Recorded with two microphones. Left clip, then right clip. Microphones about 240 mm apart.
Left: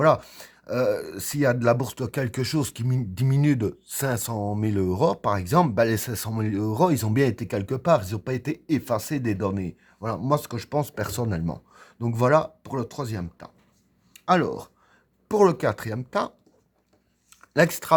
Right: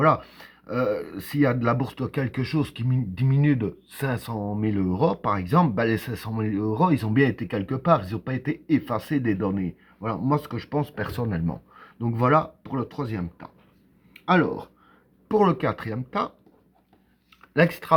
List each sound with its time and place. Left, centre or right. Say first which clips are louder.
0.0 s speech: left 1 dB; left
17.5 s speech: left 1 dB; left